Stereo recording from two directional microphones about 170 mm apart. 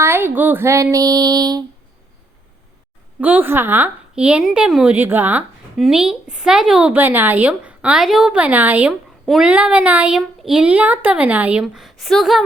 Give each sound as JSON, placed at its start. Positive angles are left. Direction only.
{"t": 0.0, "sound": "a woman's voice", "side_deg": -15}
{"t": 3.2, "sound": "a woman's voice", "side_deg": -10}